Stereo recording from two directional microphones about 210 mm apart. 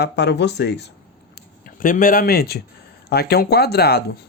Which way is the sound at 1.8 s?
40° left (ahead or behind).